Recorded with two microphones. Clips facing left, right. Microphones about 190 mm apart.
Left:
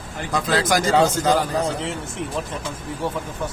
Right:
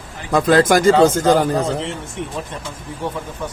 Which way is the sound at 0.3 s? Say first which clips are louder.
Right 8 dB; 55° right (ahead or behind).